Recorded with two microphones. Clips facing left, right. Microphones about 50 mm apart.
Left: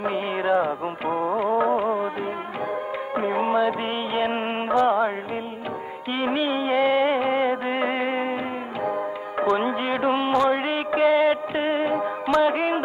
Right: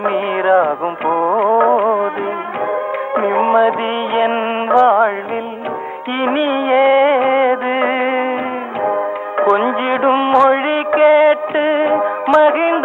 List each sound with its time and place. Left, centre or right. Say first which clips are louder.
0.0 s music: right 9 dB; right
3.2 s music: right 9 dB; right
6.2 s music: right 8 dB; right